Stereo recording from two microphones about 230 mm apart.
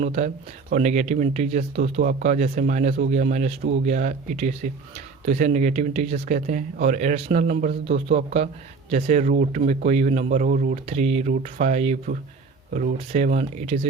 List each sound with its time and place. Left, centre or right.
0.0 s speech: right